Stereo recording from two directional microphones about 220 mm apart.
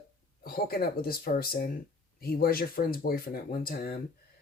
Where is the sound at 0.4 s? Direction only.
45° left (ahead or behind).